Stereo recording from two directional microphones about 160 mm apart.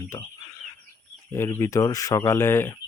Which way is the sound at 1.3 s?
15° left (ahead or behind).